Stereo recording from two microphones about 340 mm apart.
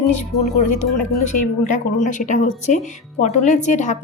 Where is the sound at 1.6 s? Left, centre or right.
Left.